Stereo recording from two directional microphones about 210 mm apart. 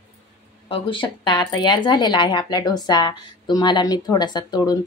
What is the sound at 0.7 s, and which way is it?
Speech, 25° left (ahead or behind).